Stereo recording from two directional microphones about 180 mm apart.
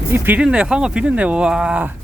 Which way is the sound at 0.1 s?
10° right (ahead or behind).